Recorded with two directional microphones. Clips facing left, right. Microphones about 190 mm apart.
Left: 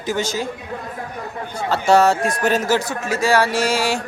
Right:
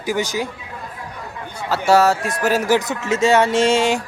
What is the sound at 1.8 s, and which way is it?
A man's voice, 5° right (ahead or behind).